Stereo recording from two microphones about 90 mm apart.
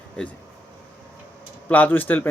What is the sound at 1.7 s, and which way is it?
Speech, 20° left (ahead or behind).